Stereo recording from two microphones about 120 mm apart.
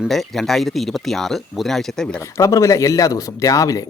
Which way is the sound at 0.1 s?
Centre (ahead or behind).